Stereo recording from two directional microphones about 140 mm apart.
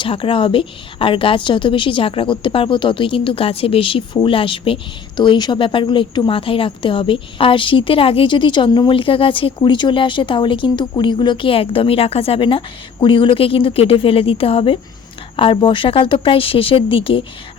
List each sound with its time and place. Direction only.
0.0 s a woman's voice: 40° left (ahead or behind)